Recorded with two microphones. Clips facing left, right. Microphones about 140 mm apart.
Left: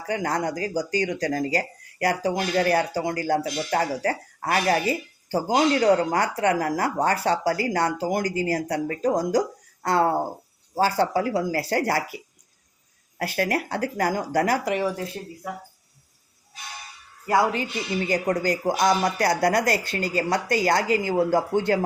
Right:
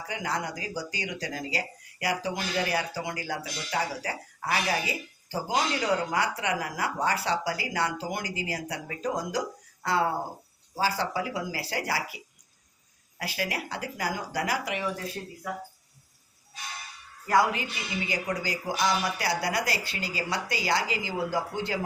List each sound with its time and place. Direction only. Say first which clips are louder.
0.1 s speech: left 7 dB; 45° left (ahead or behind)
13.1 s speech: left 8 dB; 50° left (ahead or behind)
17.2 s speech: left 3 dB; 30° left (ahead or behind)
18.0 s speech: left 8 dB; 45° left (ahead or behind)